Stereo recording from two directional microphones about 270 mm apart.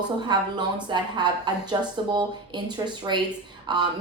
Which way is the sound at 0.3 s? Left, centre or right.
Centre.